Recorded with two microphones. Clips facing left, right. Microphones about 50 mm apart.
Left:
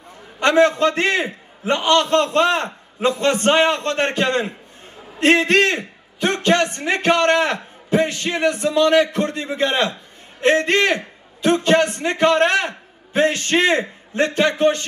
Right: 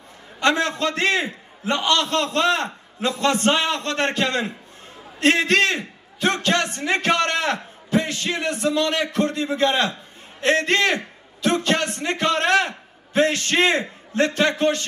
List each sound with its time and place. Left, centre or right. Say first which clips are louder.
0.4 s a man's voice: left 6 dB; left